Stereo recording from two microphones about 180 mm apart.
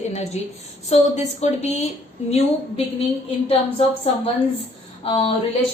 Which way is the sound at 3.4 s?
35° left (ahead or behind).